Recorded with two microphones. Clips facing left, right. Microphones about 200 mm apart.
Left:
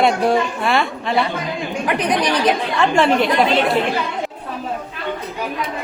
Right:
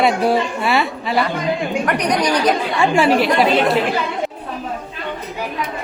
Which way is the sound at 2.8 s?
5° right (ahead or behind).